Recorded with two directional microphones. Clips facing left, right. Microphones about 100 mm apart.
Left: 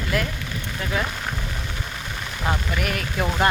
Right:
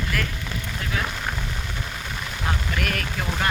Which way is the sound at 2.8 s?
15° left (ahead or behind).